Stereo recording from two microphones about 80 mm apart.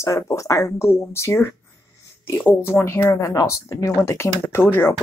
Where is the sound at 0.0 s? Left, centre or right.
Left.